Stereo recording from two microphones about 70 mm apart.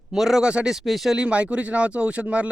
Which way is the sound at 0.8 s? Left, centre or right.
Centre.